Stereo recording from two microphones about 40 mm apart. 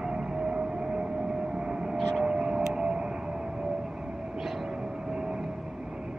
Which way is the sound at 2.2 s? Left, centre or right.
Centre.